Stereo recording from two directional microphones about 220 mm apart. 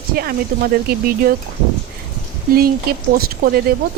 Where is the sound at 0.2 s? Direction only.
45° right (ahead or behind).